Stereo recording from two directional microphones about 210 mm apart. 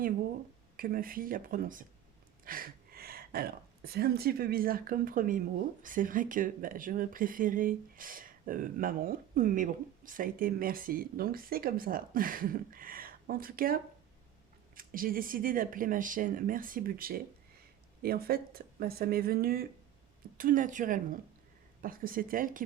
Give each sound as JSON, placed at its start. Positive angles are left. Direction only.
{"t": 0.8, "sound": "a woman's voice", "side_deg": -45}
{"t": 14.8, "sound": "speech", "side_deg": -45}